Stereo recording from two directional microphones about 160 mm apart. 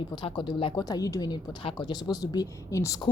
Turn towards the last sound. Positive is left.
turn(degrees=20)  # may be behind; listen again after turning